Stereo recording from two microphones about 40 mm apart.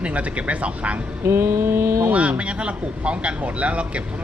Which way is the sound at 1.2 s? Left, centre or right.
Right.